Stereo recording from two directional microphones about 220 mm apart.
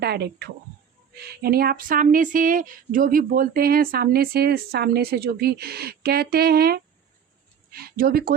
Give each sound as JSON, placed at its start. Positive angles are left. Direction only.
{"t": 0.0, "sound": "speech", "side_deg": -45}